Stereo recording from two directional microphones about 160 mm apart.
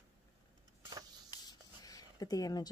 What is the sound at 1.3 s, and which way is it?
Writing, 25° left (ahead or behind).